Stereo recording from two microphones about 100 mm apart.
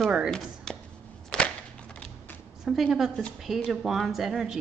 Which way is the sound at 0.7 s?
5° left (ahead or behind).